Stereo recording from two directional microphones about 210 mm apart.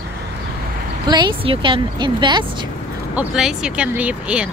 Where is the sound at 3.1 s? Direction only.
5° right (ahead or behind).